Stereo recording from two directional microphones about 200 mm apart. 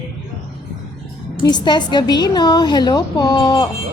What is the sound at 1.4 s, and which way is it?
A woman's voice, 20° left (ahead or behind).